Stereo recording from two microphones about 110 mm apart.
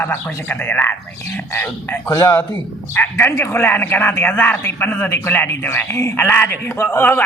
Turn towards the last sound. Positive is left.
turn(degrees=20)  # may be behind; listen again after turning